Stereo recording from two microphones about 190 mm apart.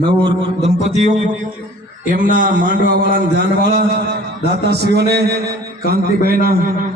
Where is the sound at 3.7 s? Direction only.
55° right (ahead or behind).